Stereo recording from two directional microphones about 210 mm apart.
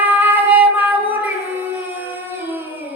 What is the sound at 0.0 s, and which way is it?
Music, 10° right (ahead or behind).